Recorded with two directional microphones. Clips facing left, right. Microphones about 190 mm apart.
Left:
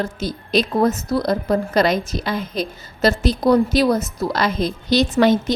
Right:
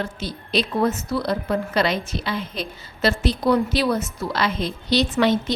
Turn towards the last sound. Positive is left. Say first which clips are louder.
# left 4 dB
turn(degrees=45)  # may be behind; listen again after turning